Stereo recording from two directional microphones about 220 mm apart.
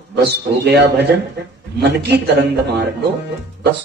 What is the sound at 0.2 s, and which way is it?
A man's voice, 50° right (ahead or behind).